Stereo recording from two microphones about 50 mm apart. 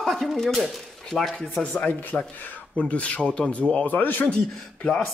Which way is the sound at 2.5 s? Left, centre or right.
Left.